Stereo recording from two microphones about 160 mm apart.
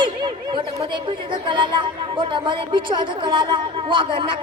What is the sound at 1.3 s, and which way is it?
A woman's voice, 30° right (ahead or behind).